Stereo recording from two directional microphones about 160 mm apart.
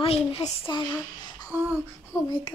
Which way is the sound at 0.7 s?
25° left (ahead or behind).